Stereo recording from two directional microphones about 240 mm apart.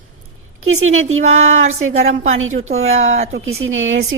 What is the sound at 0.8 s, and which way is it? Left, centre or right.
Speech, right.